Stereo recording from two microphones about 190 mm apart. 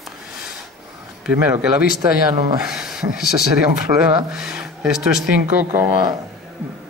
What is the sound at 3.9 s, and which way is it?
Speech, 25° right (ahead or behind).